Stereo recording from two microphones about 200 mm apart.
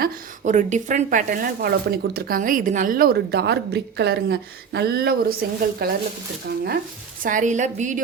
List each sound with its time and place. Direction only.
0.0 s speech: 40° right (ahead or behind)
7.2 s a woman's voice: 40° right (ahead or behind)